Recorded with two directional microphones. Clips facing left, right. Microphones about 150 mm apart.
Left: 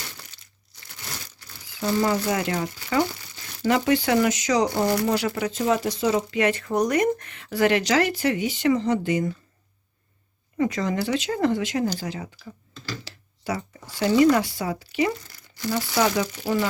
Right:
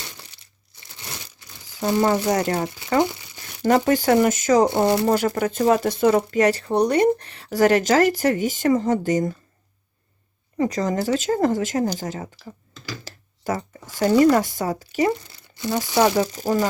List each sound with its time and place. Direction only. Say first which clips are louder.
0.8 s crumpling: right 1 dB; 20° right (ahead or behind)
2.3 s speech: right 4 dB; 35° right (ahead or behind)
3.0 s speech: right 2 dB; 20° right (ahead or behind)
3.6 s speech: right 3 dB; 45° right (ahead or behind)
4.7 s speech: right 4 dB; 25° right (ahead or behind)
5.0 s speech: right 4 dB; 45° right (ahead or behind)
6.4 s speech: right 3 dB; 35° right (ahead or behind)
10.6 s speech: right 2 dB; 40° right (ahead or behind)
13.1 s a sound: right 4 dB; 45° right (ahead or behind)
14.0 s speech: right 2 dB; 45° right (ahead or behind)
15.3 s speech: right 2 dB; 25° right (ahead or behind); by 16.6 s 40° right (ahead or behind)